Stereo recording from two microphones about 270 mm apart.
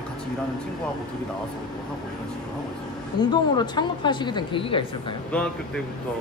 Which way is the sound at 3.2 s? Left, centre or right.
Centre.